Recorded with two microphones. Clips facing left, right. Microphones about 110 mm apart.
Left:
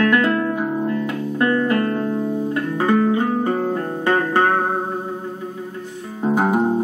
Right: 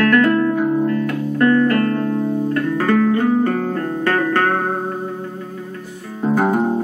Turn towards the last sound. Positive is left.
turn(degrees=10)  # may be behind; listen again after turning